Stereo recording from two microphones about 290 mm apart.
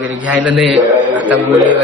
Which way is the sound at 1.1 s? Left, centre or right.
Centre.